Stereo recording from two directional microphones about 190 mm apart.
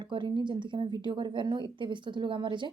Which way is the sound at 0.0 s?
25° right (ahead or behind).